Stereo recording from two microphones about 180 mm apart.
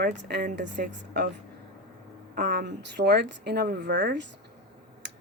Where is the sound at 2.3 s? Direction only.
60° right (ahead or behind).